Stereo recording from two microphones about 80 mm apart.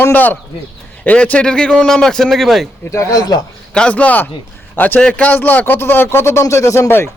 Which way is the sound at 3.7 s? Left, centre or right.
Centre.